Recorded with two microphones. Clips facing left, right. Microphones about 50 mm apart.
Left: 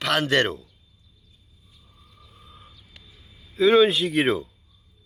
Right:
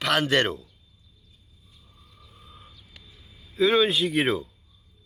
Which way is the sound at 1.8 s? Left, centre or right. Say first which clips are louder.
Left 1 dB; centre.